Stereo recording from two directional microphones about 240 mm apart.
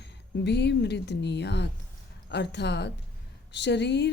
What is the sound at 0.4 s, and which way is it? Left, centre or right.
Speech, left.